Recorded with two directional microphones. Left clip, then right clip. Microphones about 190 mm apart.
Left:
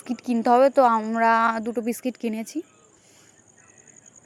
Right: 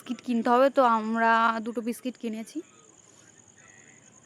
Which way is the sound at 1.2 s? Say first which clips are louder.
Left 3 dB; 10° left (ahead or behind).